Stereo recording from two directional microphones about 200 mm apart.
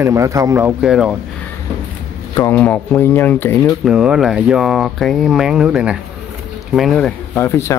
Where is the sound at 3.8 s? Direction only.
5° right (ahead or behind).